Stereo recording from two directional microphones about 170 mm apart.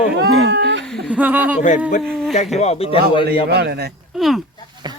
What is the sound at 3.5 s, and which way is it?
Speech, 75° right (ahead or behind).